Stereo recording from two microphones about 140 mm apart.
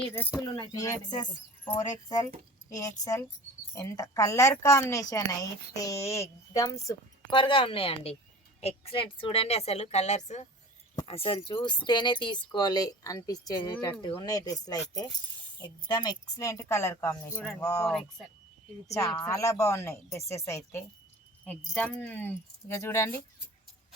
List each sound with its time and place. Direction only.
0.1 s speech: 15° left (ahead or behind)
0.3 s speech: 25° left (ahead or behind)
7.3 s a woman's voice: 35° left (ahead or behind); by 10.4 s 55° left (ahead or behind)
11.0 s speech: 45° left (ahead or behind); by 17.8 s 25° left (ahead or behind)
18.9 s speech: 25° left (ahead or behind)
21.4 s speech: 10° left (ahead or behind)